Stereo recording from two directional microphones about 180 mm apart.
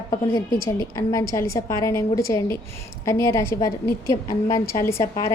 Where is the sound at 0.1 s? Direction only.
25° left (ahead or behind).